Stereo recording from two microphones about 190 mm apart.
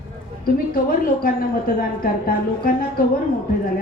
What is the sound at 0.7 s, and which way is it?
A woman's voice, 50° left (ahead or behind).